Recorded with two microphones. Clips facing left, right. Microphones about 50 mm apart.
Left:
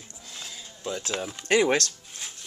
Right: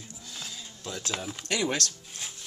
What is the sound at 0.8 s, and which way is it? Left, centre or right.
Speech, centre.